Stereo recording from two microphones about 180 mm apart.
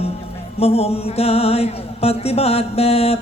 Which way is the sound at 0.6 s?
35° left (ahead or behind).